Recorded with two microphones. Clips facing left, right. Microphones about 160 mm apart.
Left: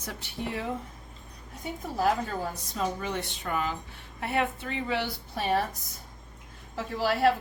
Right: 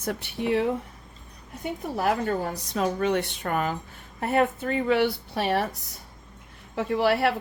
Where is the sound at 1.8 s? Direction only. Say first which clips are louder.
Right 2 dB; 65° right (ahead or behind).